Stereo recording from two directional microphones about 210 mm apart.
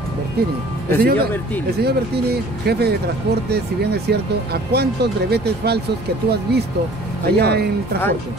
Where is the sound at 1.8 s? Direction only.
50° right (ahead or behind).